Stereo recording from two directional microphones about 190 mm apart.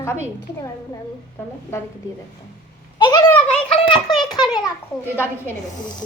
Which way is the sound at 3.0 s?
20° left (ahead or behind).